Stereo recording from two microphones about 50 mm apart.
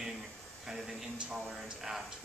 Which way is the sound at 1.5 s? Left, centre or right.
Centre.